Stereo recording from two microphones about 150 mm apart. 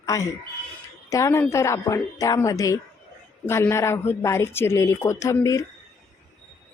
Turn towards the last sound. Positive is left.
turn(degrees=20)  # may be behind; listen again after turning